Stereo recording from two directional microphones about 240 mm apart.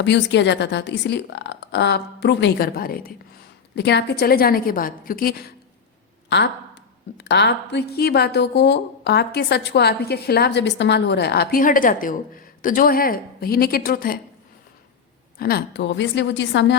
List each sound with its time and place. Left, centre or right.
0.0 s a woman's voice: left
6.2 s a sound: left
7.2 s a woman's voice: left
15.4 s a woman's voice: left